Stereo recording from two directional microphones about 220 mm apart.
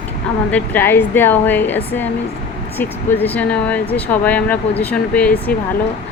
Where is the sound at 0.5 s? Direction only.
10° left (ahead or behind).